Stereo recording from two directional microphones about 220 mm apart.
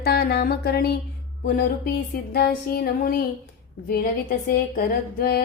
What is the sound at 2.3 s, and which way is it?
Music, 45° left (ahead or behind).